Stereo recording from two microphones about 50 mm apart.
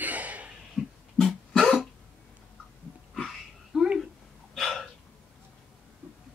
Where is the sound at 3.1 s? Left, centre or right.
Centre.